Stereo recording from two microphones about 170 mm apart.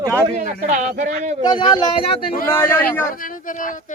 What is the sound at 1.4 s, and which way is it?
Speech, 25° left (ahead or behind).